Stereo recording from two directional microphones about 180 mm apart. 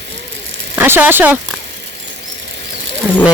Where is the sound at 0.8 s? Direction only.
10° right (ahead or behind).